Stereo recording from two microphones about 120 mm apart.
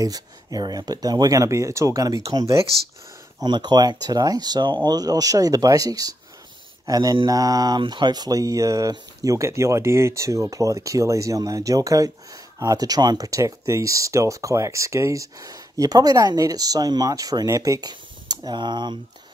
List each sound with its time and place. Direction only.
0.0 s speech: 30° right (ahead or behind)